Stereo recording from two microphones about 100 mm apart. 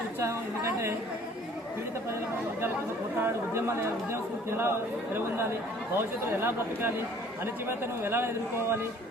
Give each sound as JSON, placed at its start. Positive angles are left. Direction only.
{"t": 0.2, "sound": "speech", "side_deg": -30}
{"t": 3.2, "sound": "speech", "side_deg": -25}
{"t": 6.0, "sound": "speech", "side_deg": -25}
{"t": 8.0, "sound": "speech", "side_deg": -25}